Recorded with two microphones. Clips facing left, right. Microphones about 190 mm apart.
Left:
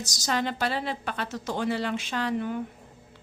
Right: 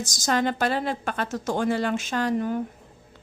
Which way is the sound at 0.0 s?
50° right (ahead or behind).